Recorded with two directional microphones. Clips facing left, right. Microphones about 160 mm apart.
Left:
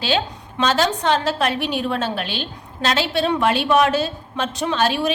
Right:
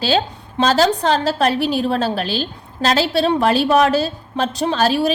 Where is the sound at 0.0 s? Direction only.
35° right (ahead or behind).